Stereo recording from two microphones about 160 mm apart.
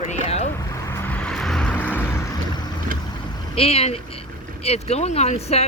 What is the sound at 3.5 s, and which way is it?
Speech, 35° left (ahead or behind).